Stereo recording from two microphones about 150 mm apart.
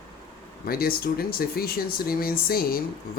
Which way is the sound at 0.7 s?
85° left.